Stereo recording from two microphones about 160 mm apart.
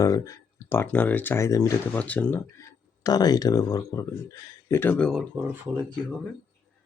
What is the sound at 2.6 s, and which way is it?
Speech, 25° left (ahead or behind).